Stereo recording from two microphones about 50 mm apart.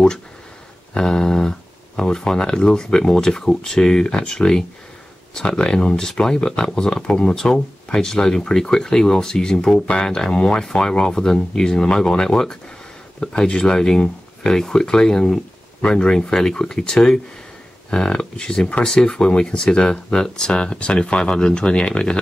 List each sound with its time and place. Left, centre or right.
0.9 s speech: centre